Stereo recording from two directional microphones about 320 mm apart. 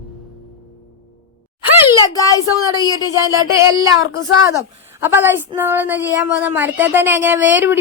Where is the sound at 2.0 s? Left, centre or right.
Centre.